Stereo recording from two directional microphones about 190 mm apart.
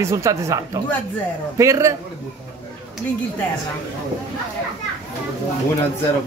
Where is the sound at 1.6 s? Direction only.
15° right (ahead or behind).